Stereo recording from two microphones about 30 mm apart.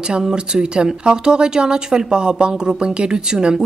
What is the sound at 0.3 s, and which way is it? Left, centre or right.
Speech, right.